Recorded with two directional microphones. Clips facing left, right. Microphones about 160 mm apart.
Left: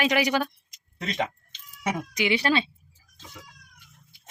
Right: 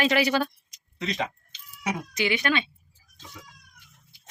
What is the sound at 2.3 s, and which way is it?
Speech, 35° left (ahead or behind).